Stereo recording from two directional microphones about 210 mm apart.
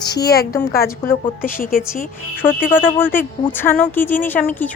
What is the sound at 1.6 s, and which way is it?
Speech, 40° left (ahead or behind).